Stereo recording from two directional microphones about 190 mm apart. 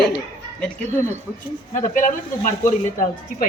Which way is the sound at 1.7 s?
40° left (ahead or behind).